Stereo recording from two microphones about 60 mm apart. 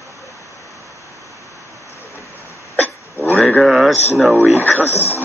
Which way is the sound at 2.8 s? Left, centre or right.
Left.